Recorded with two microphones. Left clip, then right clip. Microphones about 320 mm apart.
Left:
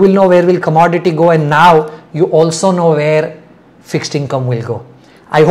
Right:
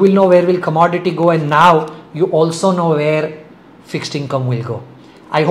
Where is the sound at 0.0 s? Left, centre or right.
Left.